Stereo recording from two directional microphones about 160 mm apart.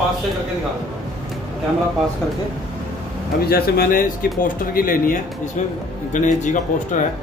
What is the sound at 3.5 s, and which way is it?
Speech, 65° left (ahead or behind).